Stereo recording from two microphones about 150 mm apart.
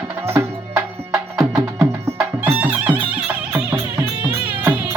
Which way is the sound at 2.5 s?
10° right (ahead or behind).